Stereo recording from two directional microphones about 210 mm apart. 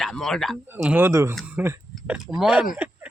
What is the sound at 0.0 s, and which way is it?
Speech, centre (ahead or behind).